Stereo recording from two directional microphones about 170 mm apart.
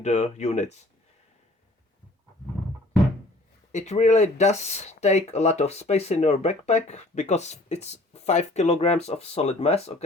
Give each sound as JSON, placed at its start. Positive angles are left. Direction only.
{"t": 0.0, "sound": "speech", "side_deg": 40}
{"t": 3.7, "sound": "speech", "side_deg": 45}